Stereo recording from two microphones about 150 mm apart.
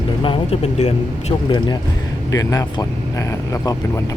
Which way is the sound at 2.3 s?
25° left (ahead or behind).